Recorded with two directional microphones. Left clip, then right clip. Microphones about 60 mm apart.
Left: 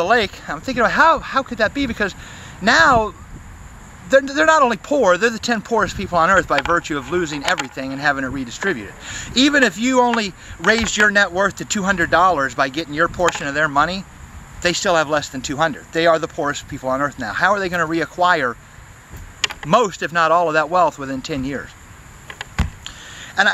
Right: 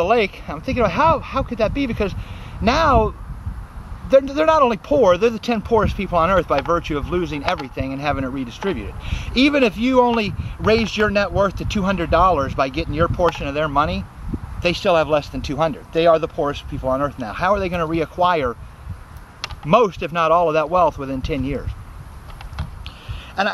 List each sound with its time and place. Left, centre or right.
0.0 s speech: right
19.7 s speech: centre
22.8 s a sound: centre